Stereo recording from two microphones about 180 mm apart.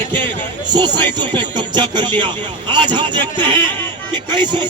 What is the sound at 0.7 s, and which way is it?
Speech, 25° right (ahead or behind).